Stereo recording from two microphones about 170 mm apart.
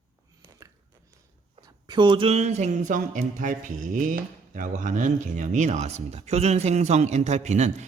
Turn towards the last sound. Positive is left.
turn(degrees=-40)  # may be behind; listen again after turning